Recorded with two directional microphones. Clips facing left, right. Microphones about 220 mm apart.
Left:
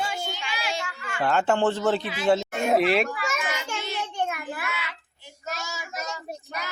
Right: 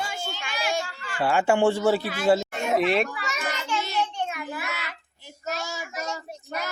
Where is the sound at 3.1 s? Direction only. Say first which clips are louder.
Left 2 dB; 50° left (ahead or behind).